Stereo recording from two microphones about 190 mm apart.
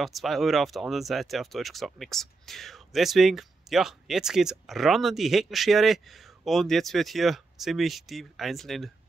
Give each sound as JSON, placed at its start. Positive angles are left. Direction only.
{"t": 0.0, "sound": "speech", "side_deg": 0}